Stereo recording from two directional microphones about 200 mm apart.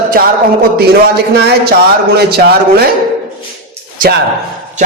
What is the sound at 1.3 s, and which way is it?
A man's voice, 55° right (ahead or behind).